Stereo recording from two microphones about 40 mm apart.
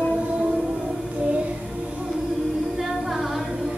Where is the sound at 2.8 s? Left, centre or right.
Centre.